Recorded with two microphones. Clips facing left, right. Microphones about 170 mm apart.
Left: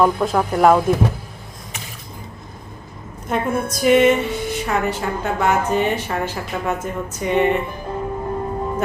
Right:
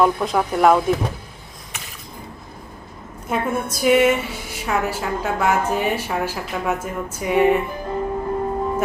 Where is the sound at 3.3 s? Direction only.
5° right (ahead or behind).